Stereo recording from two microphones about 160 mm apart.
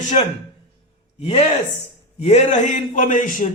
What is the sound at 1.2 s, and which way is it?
Speech, 40° left (ahead or behind).